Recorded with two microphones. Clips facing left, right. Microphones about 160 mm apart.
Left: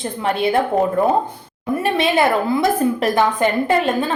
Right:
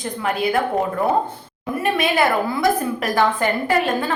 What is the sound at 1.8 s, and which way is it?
A woman's voice, 25° left (ahead or behind).